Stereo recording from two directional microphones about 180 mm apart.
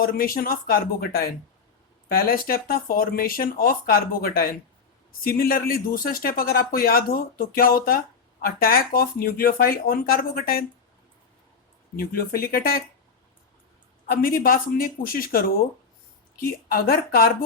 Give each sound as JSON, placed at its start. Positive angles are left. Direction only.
{"t": 0.0, "sound": "speech", "side_deg": 55}
{"t": 11.9, "sound": "speech", "side_deg": 55}
{"t": 14.1, "sound": "speech", "side_deg": 55}